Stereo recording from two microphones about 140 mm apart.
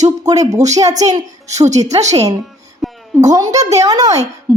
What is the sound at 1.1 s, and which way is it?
Speech, 25° right (ahead or behind).